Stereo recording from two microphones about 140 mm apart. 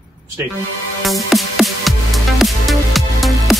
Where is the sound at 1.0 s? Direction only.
Centre (ahead or behind).